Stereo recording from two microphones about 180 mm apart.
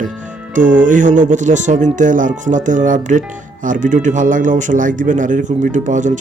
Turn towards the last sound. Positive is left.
turn(degrees=-45)  # may be behind; listen again after turning